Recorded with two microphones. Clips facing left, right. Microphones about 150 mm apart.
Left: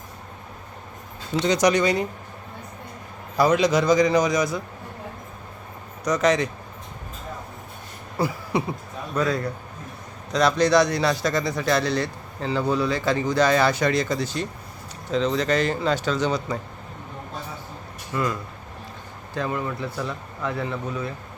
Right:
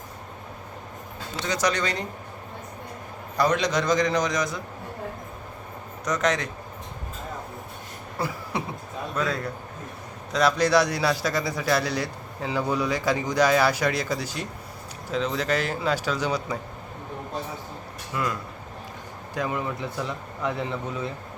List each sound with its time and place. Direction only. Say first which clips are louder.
1.5 s speech: left 6 dB; 15° left (ahead or behind)
3.3 s a man's voice: left 4 dB; 5° left (ahead or behind)
6.1 s a man's voice: left 4 dB; centre (ahead or behind)
8.2 s a man's voice: left 5 dB; centre (ahead or behind)
18.1 s a man's voice: left 3 dB; centre (ahead or behind)
19.3 s a man's voice: left 1 dB; 15° right (ahead or behind)